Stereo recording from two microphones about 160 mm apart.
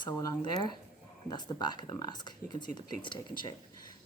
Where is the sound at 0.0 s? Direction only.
25° left (ahead or behind).